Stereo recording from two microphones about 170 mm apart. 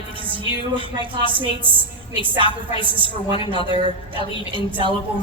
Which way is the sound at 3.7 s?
30° right (ahead or behind).